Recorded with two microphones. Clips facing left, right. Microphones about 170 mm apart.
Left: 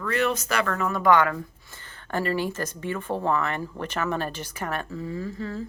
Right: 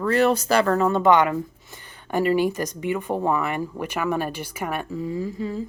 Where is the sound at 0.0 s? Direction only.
35° right (ahead or behind); by 5.6 s 15° right (ahead or behind).